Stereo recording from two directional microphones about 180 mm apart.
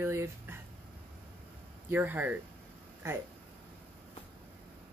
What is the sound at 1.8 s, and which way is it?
Child singing, 10° right (ahead or behind).